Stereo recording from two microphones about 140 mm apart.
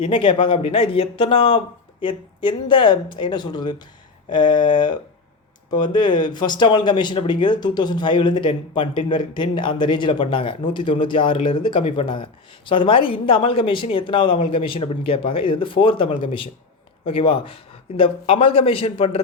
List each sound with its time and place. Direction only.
0.0 s speech: 40° left (ahead or behind)